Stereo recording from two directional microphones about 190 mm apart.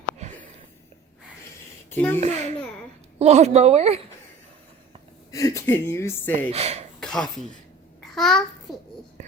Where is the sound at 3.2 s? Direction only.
35° right (ahead or behind).